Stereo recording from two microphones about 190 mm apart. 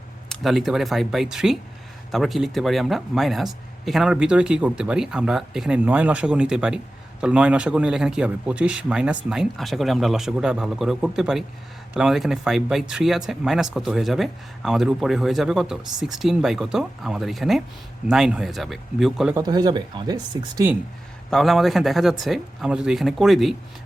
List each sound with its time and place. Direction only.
0.3 s speech: centre (ahead or behind)
19.3 s speech: 20° right (ahead or behind)
21.2 s speech: centre (ahead or behind)